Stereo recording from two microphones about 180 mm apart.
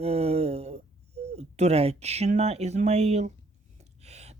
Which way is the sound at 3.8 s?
35° right (ahead or behind).